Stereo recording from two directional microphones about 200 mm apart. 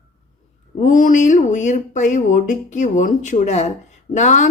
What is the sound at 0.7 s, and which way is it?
A woman's voice, 40° left (ahead or behind).